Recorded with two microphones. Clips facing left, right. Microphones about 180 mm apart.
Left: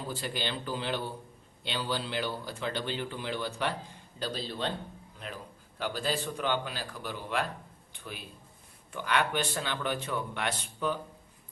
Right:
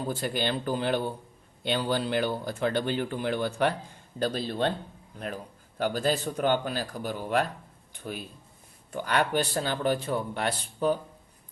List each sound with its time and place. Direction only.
0.1 s a man's voice: 50° right (ahead or behind)